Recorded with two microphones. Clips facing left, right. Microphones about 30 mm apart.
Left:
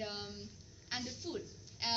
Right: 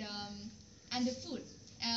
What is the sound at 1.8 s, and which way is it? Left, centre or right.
Speech, centre.